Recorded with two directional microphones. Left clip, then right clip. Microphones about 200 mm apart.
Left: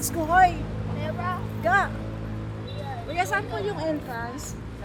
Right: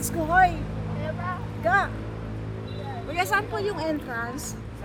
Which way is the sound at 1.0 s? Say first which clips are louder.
Left 2 dB; 50° left (ahead or behind).